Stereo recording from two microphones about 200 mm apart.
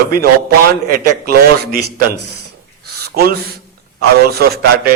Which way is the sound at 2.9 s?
50° right (ahead or behind).